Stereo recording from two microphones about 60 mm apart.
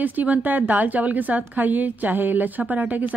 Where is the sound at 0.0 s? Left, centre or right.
Right.